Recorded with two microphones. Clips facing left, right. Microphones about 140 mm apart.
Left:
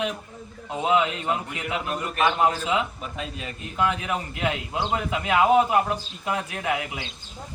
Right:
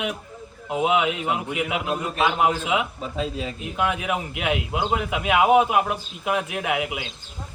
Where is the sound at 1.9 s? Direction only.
20° right (ahead or behind).